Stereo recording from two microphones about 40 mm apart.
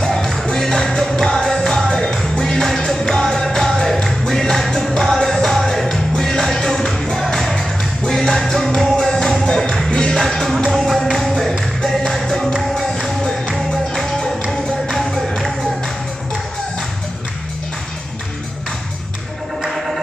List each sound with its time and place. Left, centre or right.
0.0 s music: centre
10.1 s music: centre
15.1 s music: centre